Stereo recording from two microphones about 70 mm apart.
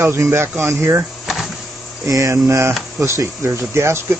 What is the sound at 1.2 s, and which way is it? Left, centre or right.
Power windows, centre.